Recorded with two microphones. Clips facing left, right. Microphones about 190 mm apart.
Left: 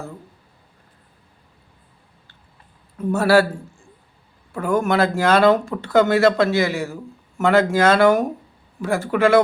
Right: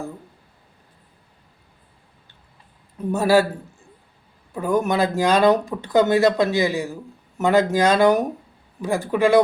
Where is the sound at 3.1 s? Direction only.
15° right (ahead or behind).